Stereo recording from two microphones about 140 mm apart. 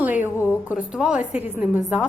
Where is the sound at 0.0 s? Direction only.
10° right (ahead or behind).